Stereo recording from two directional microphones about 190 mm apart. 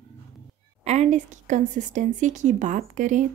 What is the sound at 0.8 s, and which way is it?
Speech, 35° right (ahead or behind).